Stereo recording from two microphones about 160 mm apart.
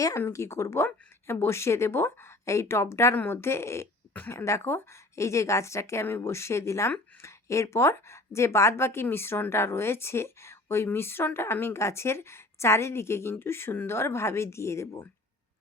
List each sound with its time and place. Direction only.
0.0 s speech: 20° left (ahead or behind)